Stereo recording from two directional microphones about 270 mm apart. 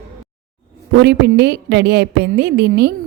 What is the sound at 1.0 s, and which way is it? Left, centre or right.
A woman's voice, right.